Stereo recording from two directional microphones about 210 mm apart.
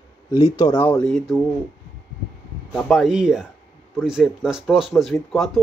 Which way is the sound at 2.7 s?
Centre (ahead or behind).